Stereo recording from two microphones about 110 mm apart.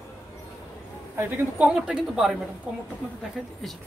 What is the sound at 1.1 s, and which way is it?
Speech, 20° right (ahead or behind).